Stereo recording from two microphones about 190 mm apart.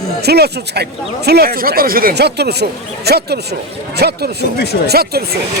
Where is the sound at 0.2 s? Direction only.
60° right (ahead or behind).